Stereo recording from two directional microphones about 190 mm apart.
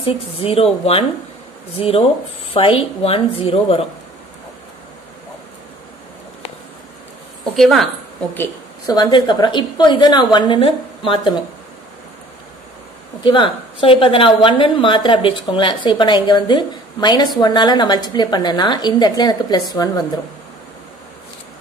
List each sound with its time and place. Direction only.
0.0 s a woman's voice: 30° left (ahead or behind)
7.5 s a woman's voice: centre (ahead or behind)
8.4 s a woman's voice: 20° left (ahead or behind)
13.2 s a woman's voice: 25° left (ahead or behind)